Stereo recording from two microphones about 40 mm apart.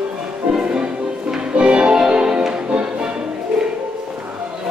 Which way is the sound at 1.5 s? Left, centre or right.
Right.